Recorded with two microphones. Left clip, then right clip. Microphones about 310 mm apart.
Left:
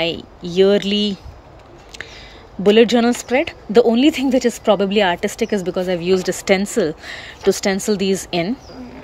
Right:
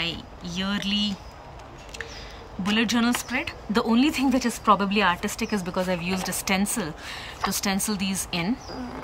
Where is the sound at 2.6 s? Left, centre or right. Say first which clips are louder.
Left 12 dB; centre.